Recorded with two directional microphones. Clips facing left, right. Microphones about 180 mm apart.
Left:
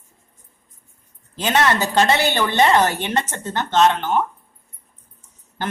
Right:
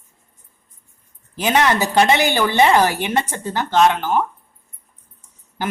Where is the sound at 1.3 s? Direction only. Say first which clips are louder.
Right 1 dB; 10° right (ahead or behind).